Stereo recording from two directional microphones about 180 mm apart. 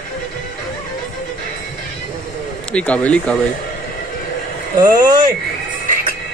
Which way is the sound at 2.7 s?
10° left (ahead or behind).